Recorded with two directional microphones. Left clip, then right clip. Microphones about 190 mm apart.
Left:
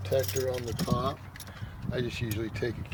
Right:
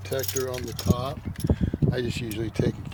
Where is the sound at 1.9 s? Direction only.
40° right (ahead or behind).